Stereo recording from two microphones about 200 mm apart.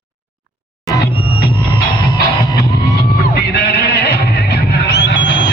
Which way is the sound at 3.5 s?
55° left (ahead or behind).